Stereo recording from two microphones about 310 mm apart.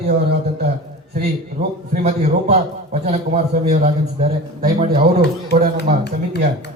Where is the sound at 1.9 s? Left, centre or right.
Right.